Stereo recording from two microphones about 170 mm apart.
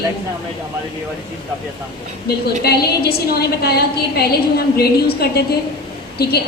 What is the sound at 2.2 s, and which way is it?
A woman's voice, 65° left (ahead or behind).